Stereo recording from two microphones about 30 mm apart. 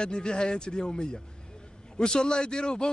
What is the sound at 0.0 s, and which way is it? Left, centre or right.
Speech, left.